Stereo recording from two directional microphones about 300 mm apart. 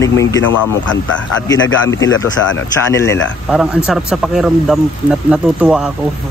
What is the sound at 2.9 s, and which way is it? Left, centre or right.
Speech, centre.